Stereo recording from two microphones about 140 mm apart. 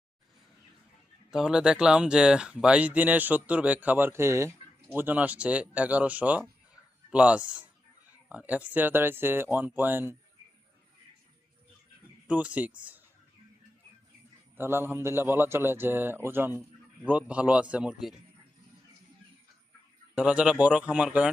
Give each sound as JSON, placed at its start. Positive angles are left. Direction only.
{"t": 1.3, "sound": "speech", "side_deg": -5}
{"t": 12.3, "sound": "speech", "side_deg": -10}
{"t": 14.5, "sound": "speech", "side_deg": -15}
{"t": 20.1, "sound": "speech", "side_deg": -10}